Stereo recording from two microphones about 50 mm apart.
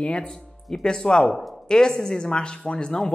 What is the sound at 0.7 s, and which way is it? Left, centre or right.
Speech, centre.